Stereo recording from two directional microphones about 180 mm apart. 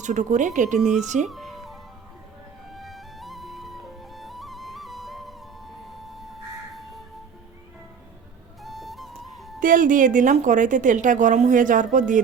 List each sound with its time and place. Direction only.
0.0 s a woman's voice: 40° right (ahead or behind)
1.3 s music: centre (ahead or behind)
8.6 s music: centre (ahead or behind)
9.6 s a woman's voice: 50° right (ahead or behind)